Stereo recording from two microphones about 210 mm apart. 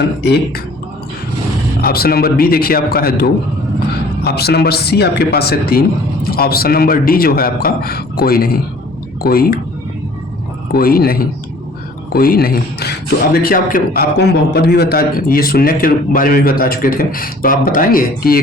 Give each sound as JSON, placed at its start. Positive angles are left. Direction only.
{"t": 0.2, "sound": "a man's voice", "side_deg": 50}
{"t": 1.8, "sound": "a man's voice", "side_deg": 45}
{"t": 10.7, "sound": "a man's voice", "side_deg": 45}